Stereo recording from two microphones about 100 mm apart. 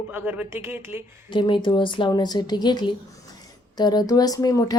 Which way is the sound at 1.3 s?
55° left (ahead or behind).